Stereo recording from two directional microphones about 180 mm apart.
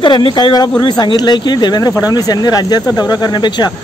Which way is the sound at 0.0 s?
25° left (ahead or behind).